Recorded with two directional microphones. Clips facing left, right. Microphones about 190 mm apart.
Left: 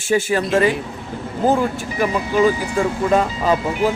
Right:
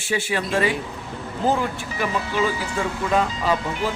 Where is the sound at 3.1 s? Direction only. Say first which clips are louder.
Left 2 dB; 45° left (ahead or behind).